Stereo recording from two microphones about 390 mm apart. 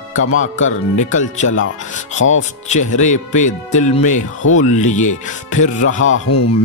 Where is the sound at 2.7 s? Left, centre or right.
Centre.